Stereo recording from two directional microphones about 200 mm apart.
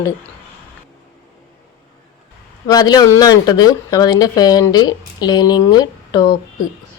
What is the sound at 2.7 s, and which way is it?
Speech, 20° left (ahead or behind).